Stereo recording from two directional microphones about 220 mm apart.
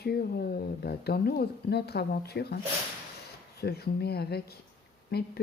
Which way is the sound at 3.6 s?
45° left (ahead or behind).